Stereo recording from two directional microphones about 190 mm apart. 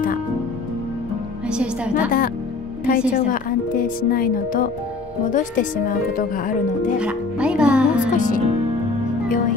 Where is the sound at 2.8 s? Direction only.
50° left (ahead or behind).